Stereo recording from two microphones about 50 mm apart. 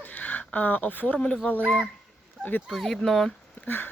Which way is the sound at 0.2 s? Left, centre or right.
Left.